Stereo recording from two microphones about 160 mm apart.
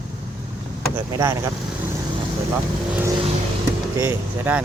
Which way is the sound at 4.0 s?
15° right (ahead or behind).